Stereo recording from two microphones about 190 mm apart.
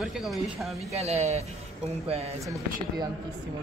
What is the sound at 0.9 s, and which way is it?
Speech, 35° right (ahead or behind).